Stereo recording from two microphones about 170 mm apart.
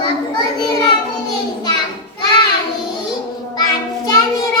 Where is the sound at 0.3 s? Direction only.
25° left (ahead or behind).